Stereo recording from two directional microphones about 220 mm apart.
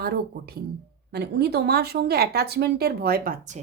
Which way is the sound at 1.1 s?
45° right (ahead or behind).